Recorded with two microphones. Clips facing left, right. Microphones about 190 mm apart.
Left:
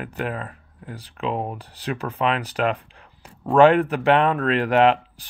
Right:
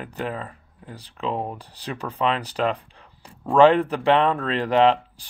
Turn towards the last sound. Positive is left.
turn(degrees=10)  # may be behind; listen again after turning